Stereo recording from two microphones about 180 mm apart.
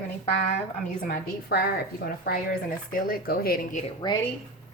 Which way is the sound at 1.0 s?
55° left (ahead or behind).